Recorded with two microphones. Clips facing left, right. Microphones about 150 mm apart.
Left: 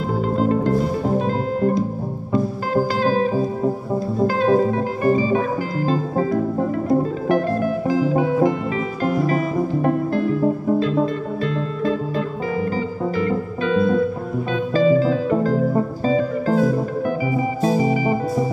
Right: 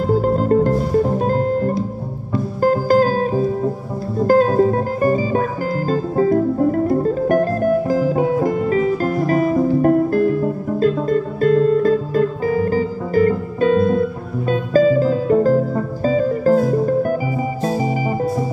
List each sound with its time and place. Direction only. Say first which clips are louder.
0.2 s music: right 4 dB; 45° right (ahead or behind)
4.3 s music: right 6 dB; 45° right (ahead or behind)
7.2 s music: right 4 dB; 45° right (ahead or behind)